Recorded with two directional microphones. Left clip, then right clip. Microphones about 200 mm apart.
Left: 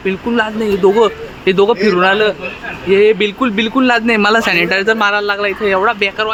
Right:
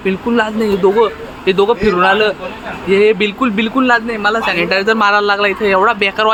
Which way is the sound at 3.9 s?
25° left (ahead or behind).